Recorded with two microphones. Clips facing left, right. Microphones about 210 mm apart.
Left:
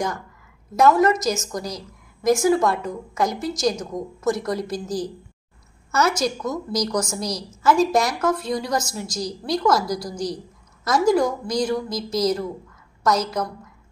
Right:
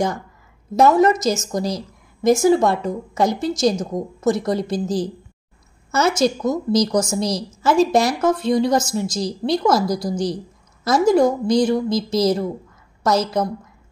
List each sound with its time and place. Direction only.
0.7 s a woman's voice: 25° right (ahead or behind)